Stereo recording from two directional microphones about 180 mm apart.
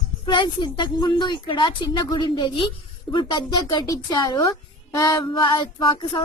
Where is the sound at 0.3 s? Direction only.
25° left (ahead or behind).